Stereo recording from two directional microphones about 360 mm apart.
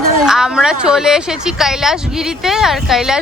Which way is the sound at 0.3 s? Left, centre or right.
Centre.